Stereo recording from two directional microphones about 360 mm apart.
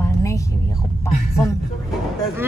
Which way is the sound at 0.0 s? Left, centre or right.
Centre.